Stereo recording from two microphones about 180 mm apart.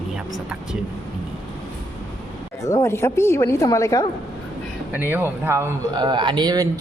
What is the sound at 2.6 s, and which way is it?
Speech, 15° left (ahead or behind).